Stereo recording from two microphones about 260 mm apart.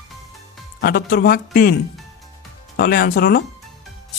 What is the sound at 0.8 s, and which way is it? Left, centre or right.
Speech, left.